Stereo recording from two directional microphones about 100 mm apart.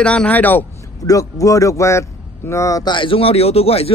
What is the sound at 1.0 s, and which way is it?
Speech, 35° left (ahead or behind).